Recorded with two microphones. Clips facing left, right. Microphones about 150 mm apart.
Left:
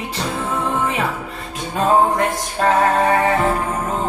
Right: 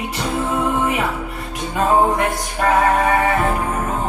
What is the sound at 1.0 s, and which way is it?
Music, 30° left (ahead or behind).